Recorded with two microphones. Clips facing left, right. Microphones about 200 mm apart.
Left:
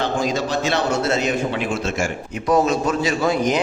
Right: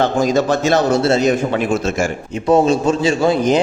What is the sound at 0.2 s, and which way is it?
Speech, 45° right (ahead or behind).